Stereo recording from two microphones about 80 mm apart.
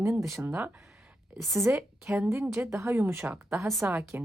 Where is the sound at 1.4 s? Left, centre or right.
Centre.